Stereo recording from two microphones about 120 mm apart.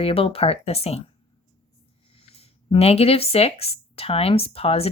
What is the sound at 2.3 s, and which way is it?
Speech, 55° left (ahead or behind).